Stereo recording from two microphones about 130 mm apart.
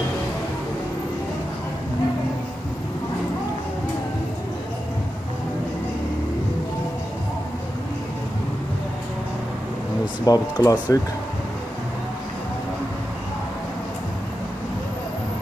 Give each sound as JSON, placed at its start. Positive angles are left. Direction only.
{"t": 10.2, "sound": "speech", "side_deg": 30}